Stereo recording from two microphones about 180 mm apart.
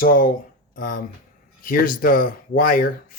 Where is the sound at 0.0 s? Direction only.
50° left (ahead or behind).